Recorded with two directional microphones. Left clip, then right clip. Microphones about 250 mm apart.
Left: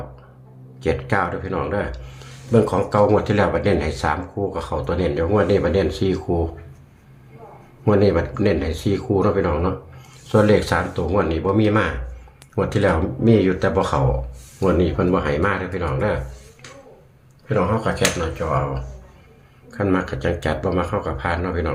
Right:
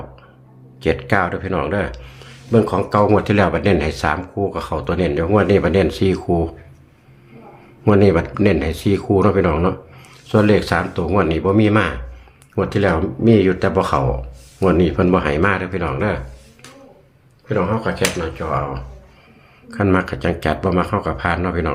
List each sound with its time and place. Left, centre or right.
0.8 s speech: centre
7.9 s speech: centre
17.5 s speech: centre
19.7 s speech: right